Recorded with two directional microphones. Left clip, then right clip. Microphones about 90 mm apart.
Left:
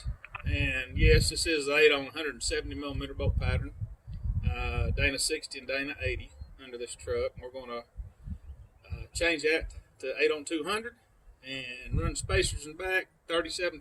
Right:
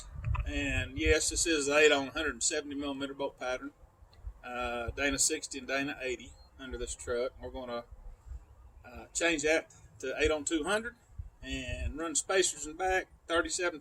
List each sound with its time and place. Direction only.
0.4 s speech: 25° right (ahead or behind)
9.1 s speech: 25° right (ahead or behind)